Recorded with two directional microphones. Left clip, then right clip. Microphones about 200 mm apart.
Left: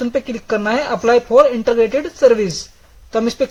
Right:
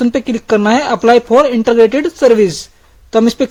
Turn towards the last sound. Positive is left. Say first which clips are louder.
# right 5 dB
turn(degrees=-45)  # may be behind; listen again after turning